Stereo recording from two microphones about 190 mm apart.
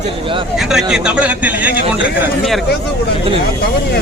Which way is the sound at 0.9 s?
5° right (ahead or behind).